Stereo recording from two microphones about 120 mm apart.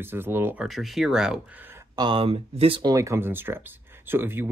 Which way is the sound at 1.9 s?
45° right (ahead or behind).